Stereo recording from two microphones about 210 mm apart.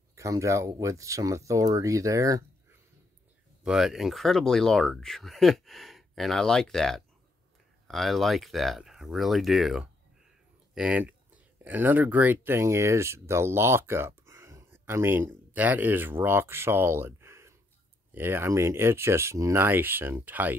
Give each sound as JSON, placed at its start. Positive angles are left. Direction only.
{"t": 0.1, "sound": "speech", "side_deg": -15}
{"t": 3.6, "sound": "speech", "side_deg": 0}